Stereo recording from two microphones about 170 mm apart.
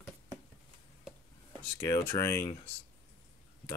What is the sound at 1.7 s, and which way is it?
Speech, 20° left (ahead or behind).